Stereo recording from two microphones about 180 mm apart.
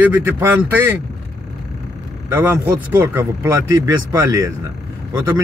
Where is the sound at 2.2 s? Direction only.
15° right (ahead or behind).